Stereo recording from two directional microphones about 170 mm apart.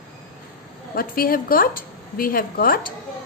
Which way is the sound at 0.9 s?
60° left (ahead or behind).